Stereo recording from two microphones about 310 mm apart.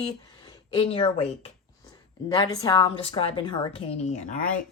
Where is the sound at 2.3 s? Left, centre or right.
Centre.